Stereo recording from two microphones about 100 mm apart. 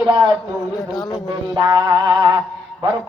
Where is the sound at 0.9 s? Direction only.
Centre (ahead or behind).